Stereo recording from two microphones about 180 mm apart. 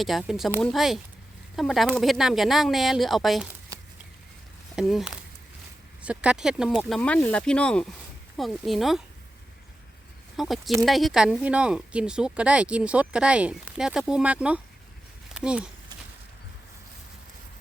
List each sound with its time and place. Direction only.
0.0 s speech: centre (ahead or behind)
3.7 s a sound: 15° right (ahead or behind)
4.7 s speech: centre (ahead or behind)
10.3 s speech: centre (ahead or behind)